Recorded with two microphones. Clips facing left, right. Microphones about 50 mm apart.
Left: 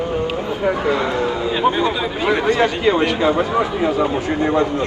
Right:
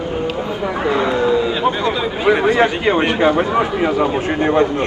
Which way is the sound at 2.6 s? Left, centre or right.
Right.